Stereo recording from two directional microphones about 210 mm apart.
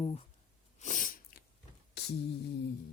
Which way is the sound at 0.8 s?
40° left (ahead or behind).